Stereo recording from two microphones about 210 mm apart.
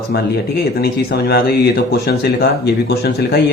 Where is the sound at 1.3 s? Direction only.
50° left (ahead or behind).